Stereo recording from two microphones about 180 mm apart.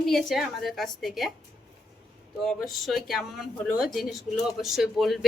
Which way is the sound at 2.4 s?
Centre (ahead or behind).